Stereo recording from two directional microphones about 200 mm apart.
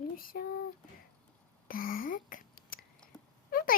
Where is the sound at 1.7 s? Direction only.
45° left (ahead or behind).